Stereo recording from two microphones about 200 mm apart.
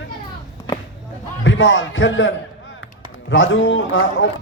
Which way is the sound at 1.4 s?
70° left (ahead or behind).